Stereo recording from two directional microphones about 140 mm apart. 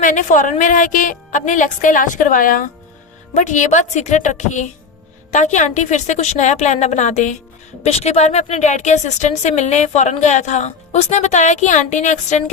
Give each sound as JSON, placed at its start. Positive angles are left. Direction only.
{"t": 0.0, "sound": "a woman's voice", "side_deg": 65}
{"t": 3.3, "sound": "speech", "side_deg": 60}
{"t": 7.9, "sound": "speech", "side_deg": 45}